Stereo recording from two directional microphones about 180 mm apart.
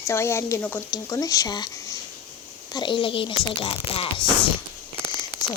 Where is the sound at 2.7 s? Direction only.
25° left (ahead or behind).